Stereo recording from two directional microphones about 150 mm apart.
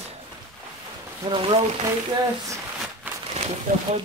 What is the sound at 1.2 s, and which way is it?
Speech, 30° right (ahead or behind).